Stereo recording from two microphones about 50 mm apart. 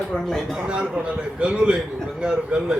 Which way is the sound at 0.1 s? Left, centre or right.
Centre.